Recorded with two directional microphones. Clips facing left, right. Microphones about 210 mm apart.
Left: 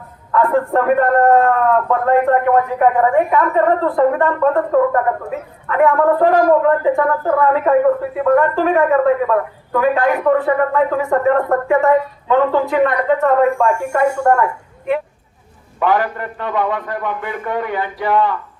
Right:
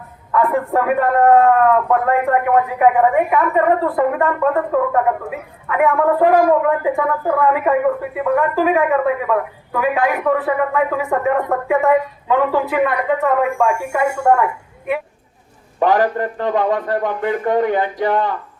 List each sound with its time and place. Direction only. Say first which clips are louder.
0.7 s a man's voice: left 2 dB; 5° right (ahead or behind)
15.8 s a man's voice: right 2 dB; 35° right (ahead or behind)